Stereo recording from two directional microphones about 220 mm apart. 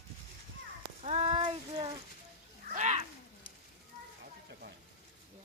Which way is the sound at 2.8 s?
30° right (ahead or behind).